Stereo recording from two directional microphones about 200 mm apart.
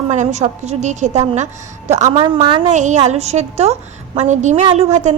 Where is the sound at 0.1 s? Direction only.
35° right (ahead or behind).